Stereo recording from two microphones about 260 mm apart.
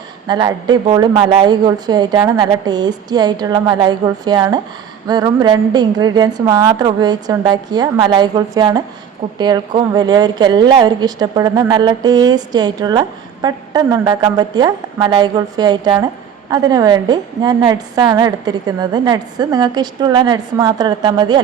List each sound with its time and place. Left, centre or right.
0.3 s a woman's voice: centre